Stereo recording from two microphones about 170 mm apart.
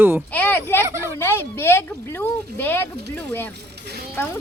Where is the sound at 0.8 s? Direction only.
15° right (ahead or behind).